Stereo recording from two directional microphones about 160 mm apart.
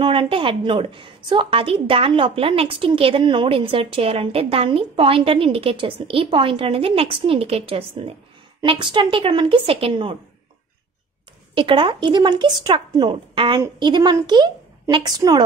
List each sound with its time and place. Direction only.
0.0 s a woman's voice: 35° right (ahead or behind)
11.5 s a woman's voice: 30° right (ahead or behind)